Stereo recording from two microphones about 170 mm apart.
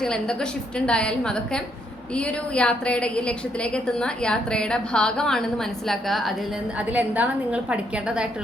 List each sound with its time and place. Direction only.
0.0 s a woman's voice: 5° left (ahead or behind)